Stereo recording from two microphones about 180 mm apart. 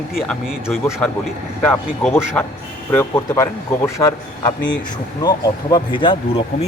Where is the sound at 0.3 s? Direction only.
Centre (ahead or behind).